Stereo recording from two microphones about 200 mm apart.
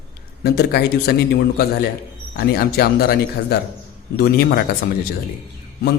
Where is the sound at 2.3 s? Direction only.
50° left (ahead or behind).